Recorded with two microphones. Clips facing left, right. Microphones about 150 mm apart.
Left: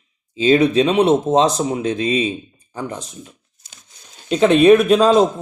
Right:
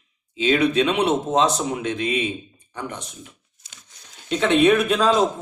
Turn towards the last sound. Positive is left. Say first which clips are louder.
# left 7 dB
turn(degrees=35)  # may be behind; listen again after turning